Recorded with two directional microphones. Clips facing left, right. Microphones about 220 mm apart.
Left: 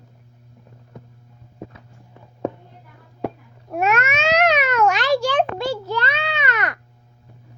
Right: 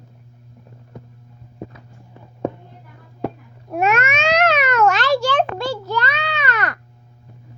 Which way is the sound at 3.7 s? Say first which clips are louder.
Right 2 dB; centre (ahead or behind).